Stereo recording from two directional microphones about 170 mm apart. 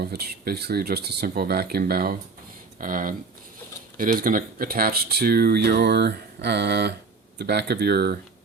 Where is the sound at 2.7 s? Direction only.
50° right (ahead or behind); by 8.1 s 70° right (ahead or behind).